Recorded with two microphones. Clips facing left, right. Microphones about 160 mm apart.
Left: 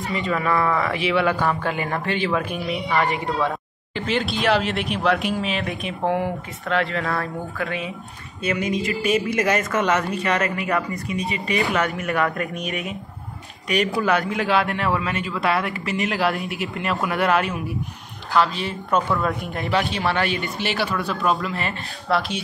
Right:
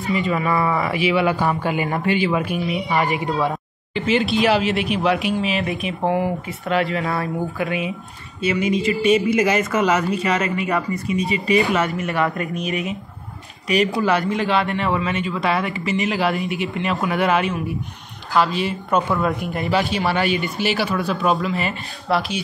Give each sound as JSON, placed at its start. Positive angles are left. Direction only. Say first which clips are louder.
{"t": 0.1, "sound": "a man's voice", "louder": "right 3 dB", "side_deg": -5}
{"t": 2.9, "sound": "speech", "louder": "even", "side_deg": -15}
{"t": 3.9, "sound": "a man's voice", "louder": "right 5 dB", "side_deg": 0}
{"t": 7.0, "sound": "a man's voice", "louder": "right 3 dB", "side_deg": -15}